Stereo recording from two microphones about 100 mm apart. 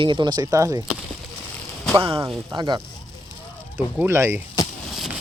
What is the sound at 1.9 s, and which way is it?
Speech, 65° right (ahead or behind).